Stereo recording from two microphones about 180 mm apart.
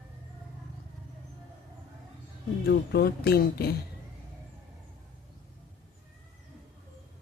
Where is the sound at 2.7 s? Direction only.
60° left (ahead or behind).